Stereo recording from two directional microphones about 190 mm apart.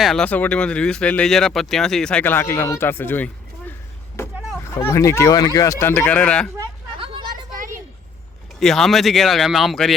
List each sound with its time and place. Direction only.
0.0 s speech: 5° left (ahead or behind)
4.8 s speech: 15° left (ahead or behind)
7.0 s vehicle: 25° right (ahead or behind)
8.6 s speech: centre (ahead or behind)